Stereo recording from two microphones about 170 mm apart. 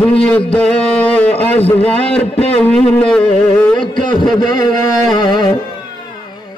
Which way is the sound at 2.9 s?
5° left (ahead or behind).